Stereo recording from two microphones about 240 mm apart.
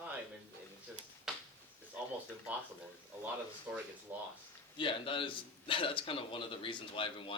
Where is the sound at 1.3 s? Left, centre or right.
Centre.